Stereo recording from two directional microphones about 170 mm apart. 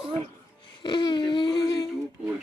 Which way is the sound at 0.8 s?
25° left (ahead or behind).